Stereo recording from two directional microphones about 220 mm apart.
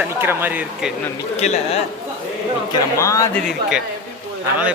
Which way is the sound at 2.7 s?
15° left (ahead or behind).